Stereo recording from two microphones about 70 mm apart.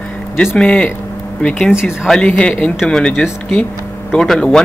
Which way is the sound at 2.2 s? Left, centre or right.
Centre.